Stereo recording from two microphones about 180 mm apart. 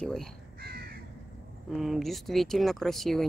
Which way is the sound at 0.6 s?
60° right (ahead or behind).